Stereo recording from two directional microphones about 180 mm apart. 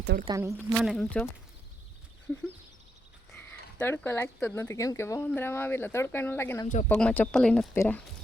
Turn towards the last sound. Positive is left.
turn(degrees=10)  # may be behind; listen again after turning